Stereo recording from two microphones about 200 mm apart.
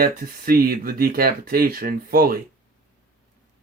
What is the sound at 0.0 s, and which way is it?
Speech, 45° right (ahead or behind).